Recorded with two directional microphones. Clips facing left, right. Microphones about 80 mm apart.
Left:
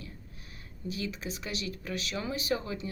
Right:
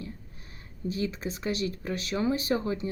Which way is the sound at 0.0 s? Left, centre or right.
Right.